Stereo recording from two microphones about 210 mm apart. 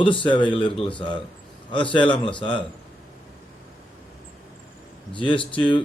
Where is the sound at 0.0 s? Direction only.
25° left (ahead or behind).